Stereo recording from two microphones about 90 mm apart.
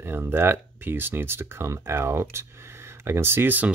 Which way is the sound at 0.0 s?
25° right (ahead or behind).